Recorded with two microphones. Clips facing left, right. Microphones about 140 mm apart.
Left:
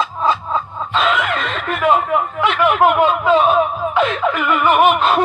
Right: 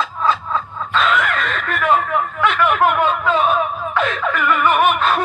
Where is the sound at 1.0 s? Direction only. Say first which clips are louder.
Left 1 dB; 10° left (ahead or behind).